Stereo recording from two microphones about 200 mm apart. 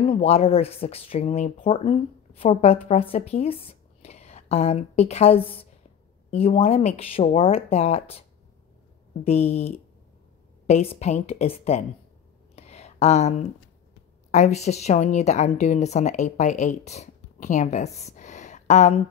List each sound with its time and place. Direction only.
0.1 s speech: 30° left (ahead or behind)
9.2 s speech: 30° left (ahead or behind)
12.5 s a sound: 30° left (ahead or behind)
14.3 s a woman's voice: 35° left (ahead or behind)